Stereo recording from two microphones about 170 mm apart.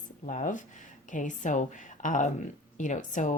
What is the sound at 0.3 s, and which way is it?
Speech, 50° left (ahead or behind).